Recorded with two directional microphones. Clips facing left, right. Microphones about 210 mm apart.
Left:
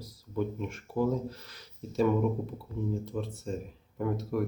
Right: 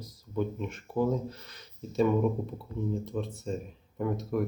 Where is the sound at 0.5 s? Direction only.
5° left (ahead or behind).